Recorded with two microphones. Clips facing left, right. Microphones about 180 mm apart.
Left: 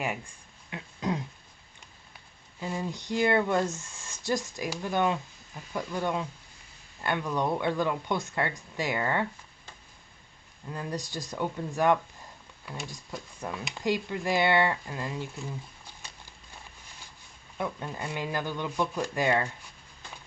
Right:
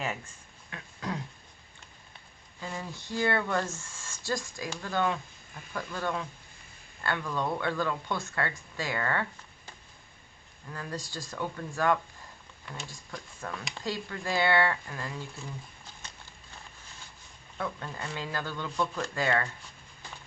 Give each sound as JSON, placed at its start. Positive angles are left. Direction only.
{"t": 0.7, "sound": "a sound", "side_deg": 20}
{"t": 2.6, "sound": "speech", "side_deg": 20}
{"t": 10.7, "sound": "speech", "side_deg": 20}
{"t": 12.6, "sound": "speech", "side_deg": 0}
{"t": 13.4, "sound": "speech", "side_deg": 15}
{"t": 17.6, "sound": "speech", "side_deg": 15}